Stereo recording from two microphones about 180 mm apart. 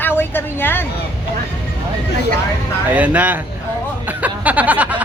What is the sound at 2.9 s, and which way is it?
Speech, 10° right (ahead or behind).